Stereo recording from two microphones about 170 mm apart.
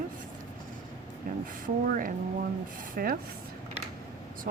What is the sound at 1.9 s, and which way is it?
Speech, 55° right (ahead or behind).